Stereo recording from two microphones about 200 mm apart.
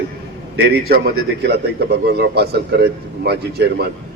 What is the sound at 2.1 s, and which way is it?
A man's voice, 55° right (ahead or behind).